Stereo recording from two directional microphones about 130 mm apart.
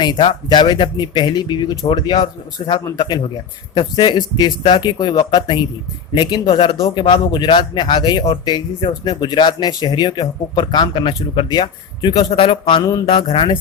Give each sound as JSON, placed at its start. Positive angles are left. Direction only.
{"t": 0.0, "sound": "speech", "side_deg": 35}
{"t": 12.8, "sound": "a sound", "side_deg": 25}
{"t": 13.1, "sound": "speech", "side_deg": 40}